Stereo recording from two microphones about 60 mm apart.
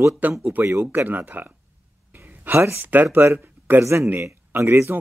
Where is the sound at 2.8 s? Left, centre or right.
Right.